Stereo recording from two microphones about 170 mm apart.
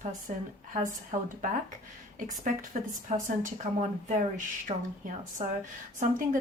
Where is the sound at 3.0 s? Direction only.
50° right (ahead or behind).